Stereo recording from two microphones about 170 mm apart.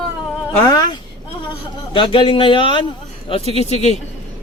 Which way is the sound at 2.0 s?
30° left (ahead or behind).